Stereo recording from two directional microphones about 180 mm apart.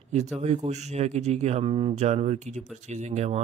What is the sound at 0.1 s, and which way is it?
Speech, 40° right (ahead or behind).